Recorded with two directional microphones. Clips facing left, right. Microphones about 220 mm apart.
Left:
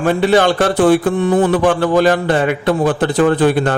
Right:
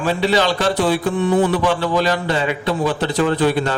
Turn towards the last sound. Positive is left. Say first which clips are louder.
# left 4 dB
turn(degrees=50)  # may be behind; listen again after turning